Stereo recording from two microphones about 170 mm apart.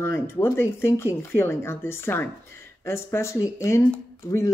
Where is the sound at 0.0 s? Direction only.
15° left (ahead or behind).